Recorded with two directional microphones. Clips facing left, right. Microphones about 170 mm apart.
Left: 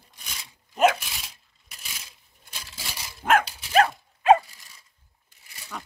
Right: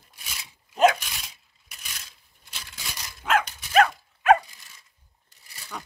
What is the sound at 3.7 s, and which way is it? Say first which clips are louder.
Dog: right 1 dB; 35° left (ahead or behind).